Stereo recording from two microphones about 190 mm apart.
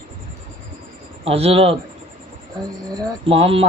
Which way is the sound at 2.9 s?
25° right (ahead or behind).